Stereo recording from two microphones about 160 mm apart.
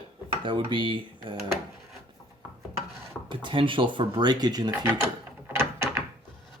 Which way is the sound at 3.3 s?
30° right (ahead or behind).